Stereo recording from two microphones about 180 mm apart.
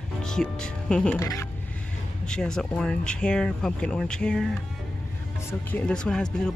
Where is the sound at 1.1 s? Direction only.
20° left (ahead or behind).